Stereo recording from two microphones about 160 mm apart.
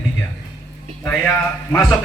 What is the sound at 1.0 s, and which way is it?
Speech, 15° left (ahead or behind).